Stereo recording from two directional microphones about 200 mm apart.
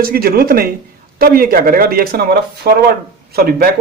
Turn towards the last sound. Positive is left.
turn(degrees=-50)  # may be behind; listen again after turning